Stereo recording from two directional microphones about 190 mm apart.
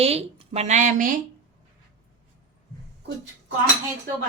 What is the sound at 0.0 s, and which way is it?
Speech, 30° right (ahead or behind).